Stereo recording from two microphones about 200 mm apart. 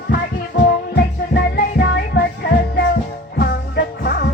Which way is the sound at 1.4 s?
55° left (ahead or behind).